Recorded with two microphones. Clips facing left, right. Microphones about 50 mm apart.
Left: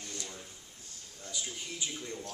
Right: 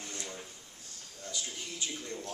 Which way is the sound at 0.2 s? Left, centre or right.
Centre.